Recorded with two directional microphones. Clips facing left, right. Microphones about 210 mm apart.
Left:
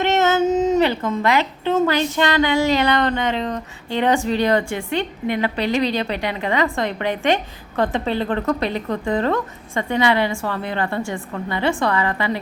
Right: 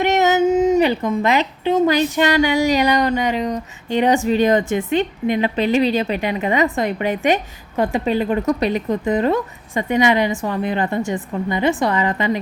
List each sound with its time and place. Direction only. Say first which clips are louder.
0.0 s speech: right 2 dB; 15° right (ahead or behind)